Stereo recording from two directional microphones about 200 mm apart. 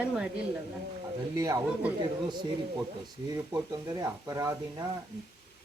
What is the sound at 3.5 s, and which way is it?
A woman's voice, 15° right (ahead or behind).